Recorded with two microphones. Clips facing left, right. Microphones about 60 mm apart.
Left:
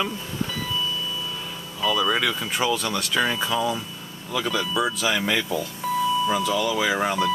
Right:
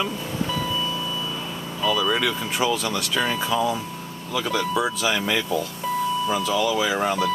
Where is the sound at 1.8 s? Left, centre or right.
Centre.